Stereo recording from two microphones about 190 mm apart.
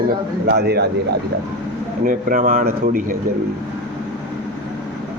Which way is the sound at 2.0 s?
45° right (ahead or behind).